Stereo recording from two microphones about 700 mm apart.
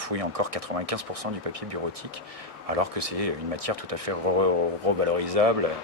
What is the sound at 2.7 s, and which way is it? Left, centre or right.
Speech, right.